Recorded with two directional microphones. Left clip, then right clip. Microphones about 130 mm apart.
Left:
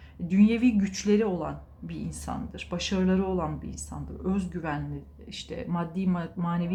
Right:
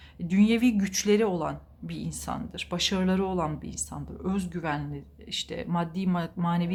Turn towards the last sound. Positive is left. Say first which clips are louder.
# right 2 dB
turn(degrees=-35)  # may be behind; listen again after turning